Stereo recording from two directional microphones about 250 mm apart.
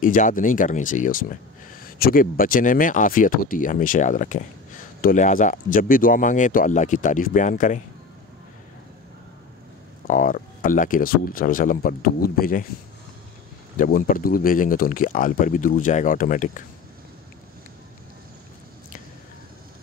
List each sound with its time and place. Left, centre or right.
0.0 s speech: left
10.0 s speech: left
13.7 s speech: left